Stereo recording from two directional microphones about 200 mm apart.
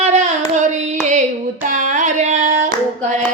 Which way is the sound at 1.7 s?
40° right (ahead or behind).